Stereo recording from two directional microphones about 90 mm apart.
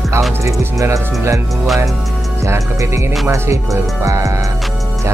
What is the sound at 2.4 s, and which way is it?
Music, 35° right (ahead or behind).